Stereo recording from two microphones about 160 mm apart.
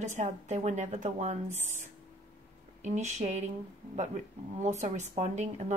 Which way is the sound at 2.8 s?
45° right (ahead or behind).